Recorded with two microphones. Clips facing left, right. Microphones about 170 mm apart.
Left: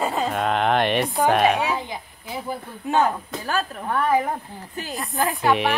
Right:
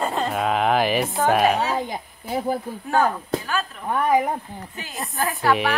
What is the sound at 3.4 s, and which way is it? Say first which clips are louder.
Speech: left 2 dB; 40° left (ahead or behind).